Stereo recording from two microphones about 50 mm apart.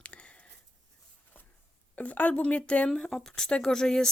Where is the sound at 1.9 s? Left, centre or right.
Left.